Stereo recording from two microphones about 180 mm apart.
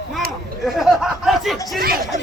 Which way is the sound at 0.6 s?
Centre (ahead or behind).